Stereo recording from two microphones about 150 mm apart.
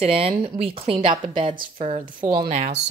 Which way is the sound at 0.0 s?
40° right (ahead or behind).